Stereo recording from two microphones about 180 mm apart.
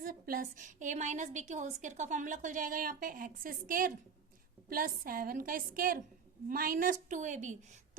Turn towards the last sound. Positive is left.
turn(degrees=-45)  # may be behind; listen again after turning